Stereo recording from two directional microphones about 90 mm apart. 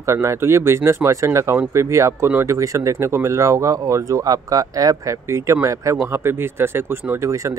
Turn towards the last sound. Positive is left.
turn(degrees=-35)  # may be behind; listen again after turning